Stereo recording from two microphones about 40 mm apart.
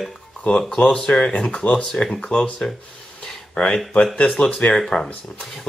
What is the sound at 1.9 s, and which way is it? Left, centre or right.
Speech, centre.